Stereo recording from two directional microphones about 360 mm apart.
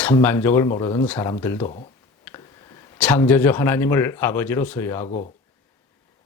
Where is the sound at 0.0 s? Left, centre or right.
Centre.